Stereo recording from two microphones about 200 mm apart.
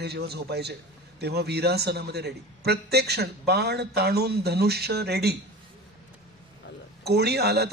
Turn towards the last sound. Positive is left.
turn(degrees=-55)  # may be behind; listen again after turning